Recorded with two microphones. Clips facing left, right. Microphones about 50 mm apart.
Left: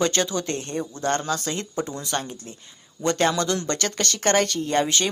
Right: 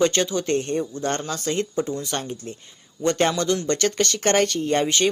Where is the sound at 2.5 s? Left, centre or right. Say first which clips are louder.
Right 6 dB; right.